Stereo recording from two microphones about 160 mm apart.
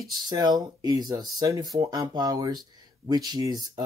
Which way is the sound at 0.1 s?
25° right (ahead or behind).